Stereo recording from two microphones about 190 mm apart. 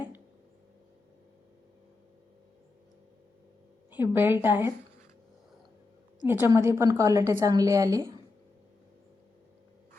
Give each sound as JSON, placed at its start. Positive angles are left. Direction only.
{"t": 3.9, "sound": "a woman's voice", "side_deg": -10}
{"t": 6.2, "sound": "a woman's voice", "side_deg": -10}